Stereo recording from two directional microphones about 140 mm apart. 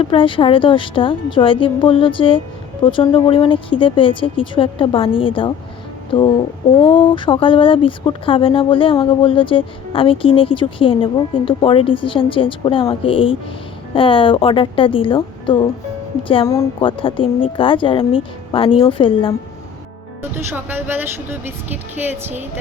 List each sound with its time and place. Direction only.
0.0 s speech: 40° left (ahead or behind)
20.3 s speech: 15° right (ahead or behind)